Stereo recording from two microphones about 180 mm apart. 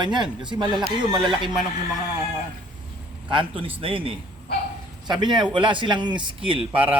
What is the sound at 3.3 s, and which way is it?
Speech, 30° right (ahead or behind).